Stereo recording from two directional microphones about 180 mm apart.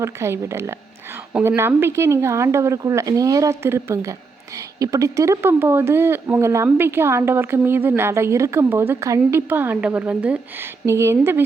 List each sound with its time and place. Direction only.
0.0 s a woman's voice: 15° right (ahead or behind)